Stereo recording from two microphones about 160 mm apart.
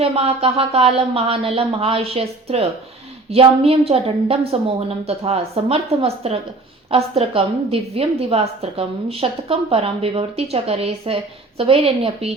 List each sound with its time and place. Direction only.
0.0 s a woman's voice: 40° right (ahead or behind)